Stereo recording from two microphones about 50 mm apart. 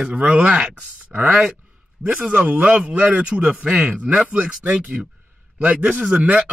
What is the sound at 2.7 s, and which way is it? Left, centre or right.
A man's voice, right.